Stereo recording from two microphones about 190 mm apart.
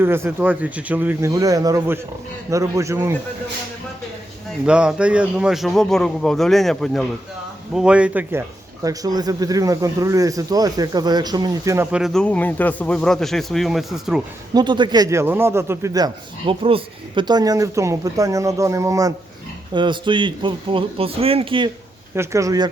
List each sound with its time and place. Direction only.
0.0 s speech: 10° right (ahead or behind)
4.6 s a man's voice: 5° right (ahead or behind)
14.5 s speech: 25° right (ahead or behind)
22.1 s speech: 15° right (ahead or behind)